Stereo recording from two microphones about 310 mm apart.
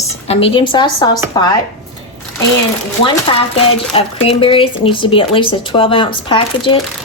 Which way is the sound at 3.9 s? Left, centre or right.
Centre.